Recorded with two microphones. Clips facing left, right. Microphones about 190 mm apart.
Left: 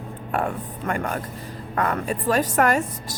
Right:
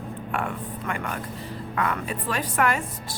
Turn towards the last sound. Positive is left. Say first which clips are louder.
# left 4 dB
turn(degrees=45)  # may be behind; listen again after turning